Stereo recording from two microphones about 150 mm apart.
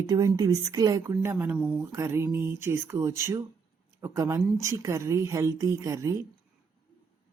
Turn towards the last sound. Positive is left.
turn(degrees=-20)  # may be behind; listen again after turning